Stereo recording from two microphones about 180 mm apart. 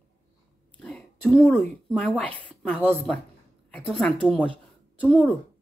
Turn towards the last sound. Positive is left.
turn(degrees=10)  # may be behind; listen again after turning